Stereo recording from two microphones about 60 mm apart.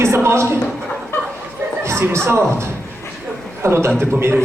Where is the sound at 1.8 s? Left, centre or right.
Right.